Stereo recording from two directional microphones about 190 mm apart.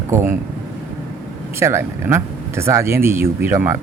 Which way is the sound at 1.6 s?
15° right (ahead or behind).